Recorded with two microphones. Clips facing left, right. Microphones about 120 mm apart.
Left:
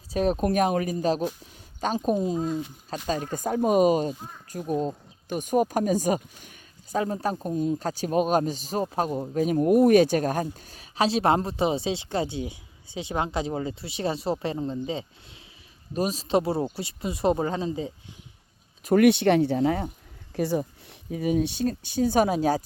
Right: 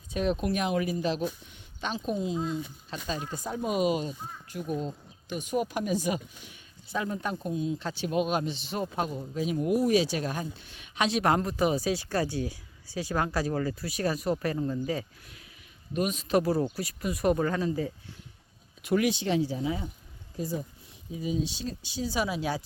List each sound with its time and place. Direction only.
0.1 s speech: 40° left (ahead or behind); by 17.9 s 25° left (ahead or behind)
18.9 s speech: 55° left (ahead or behind)
20.3 s speech: 75° left (ahead or behind); by 22.6 s 45° left (ahead or behind)